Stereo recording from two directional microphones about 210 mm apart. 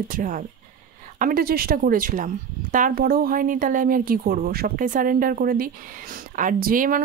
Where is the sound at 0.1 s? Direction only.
40° right (ahead or behind).